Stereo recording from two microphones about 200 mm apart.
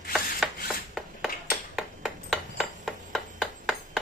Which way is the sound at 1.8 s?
Centre (ahead or behind).